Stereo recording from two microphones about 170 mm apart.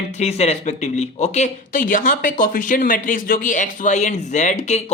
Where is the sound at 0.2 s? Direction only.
40° left (ahead or behind).